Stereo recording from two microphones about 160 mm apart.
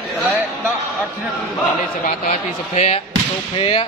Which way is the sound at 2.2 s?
45° left (ahead or behind).